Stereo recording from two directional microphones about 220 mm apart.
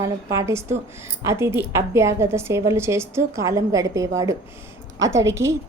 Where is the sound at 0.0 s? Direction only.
15° right (ahead or behind).